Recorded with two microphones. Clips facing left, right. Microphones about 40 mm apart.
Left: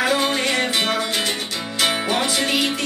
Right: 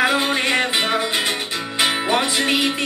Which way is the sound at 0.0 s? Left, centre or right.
Right.